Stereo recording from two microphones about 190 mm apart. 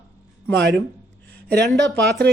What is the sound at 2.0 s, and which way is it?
Speech, 55° right (ahead or behind).